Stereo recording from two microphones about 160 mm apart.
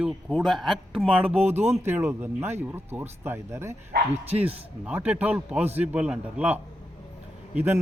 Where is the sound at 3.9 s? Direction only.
80° right.